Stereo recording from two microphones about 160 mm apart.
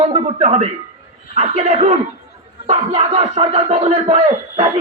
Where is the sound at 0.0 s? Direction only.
45° right (ahead or behind).